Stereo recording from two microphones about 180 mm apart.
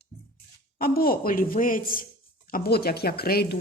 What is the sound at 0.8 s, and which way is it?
A woman's voice, 55° left (ahead or behind).